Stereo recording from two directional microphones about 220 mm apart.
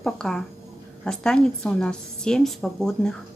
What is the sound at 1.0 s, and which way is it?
Speech, 5° left (ahead or behind).